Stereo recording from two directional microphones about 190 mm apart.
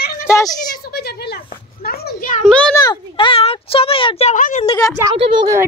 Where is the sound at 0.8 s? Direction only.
55° left (ahead or behind).